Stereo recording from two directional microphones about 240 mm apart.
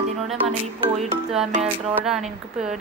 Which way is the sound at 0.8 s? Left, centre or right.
Right.